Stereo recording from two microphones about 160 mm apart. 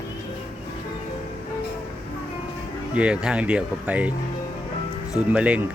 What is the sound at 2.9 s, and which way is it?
Speech, 5° right (ahead or behind).